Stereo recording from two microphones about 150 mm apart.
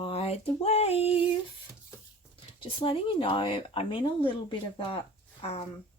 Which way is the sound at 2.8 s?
35° left (ahead or behind).